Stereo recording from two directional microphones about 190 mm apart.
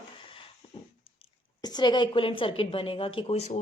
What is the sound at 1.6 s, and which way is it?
A woman's voice, 20° left (ahead or behind).